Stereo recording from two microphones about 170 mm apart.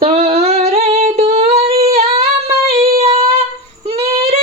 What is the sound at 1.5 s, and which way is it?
Humming, 35° right (ahead or behind).